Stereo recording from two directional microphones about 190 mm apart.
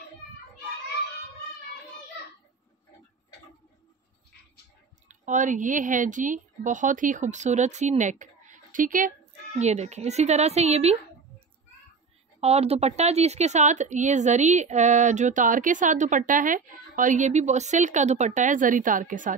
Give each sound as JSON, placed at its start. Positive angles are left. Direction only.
{"t": 5.0, "sound": "a woman's voice", "side_deg": -40}